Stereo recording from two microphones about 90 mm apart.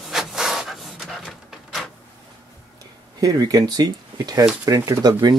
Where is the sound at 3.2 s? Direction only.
45° right (ahead or behind).